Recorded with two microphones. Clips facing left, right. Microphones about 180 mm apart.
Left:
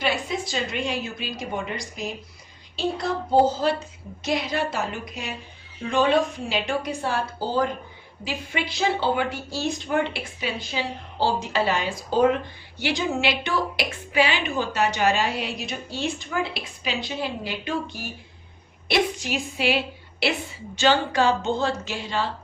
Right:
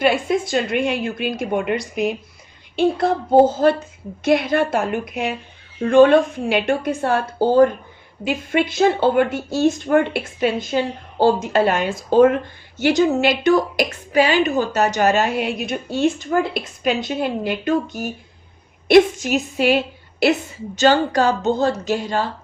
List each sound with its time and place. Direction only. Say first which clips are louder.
0.0 s a woman's voice: right 8 dB; 55° right (ahead or behind)